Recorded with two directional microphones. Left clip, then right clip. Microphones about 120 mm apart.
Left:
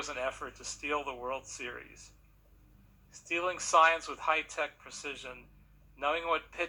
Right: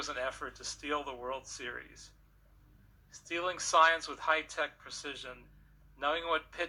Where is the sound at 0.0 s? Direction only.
20° right (ahead or behind).